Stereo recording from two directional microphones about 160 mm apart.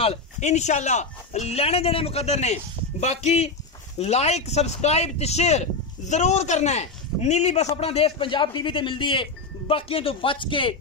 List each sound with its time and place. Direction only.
0.0 s speech: 40° left (ahead or behind)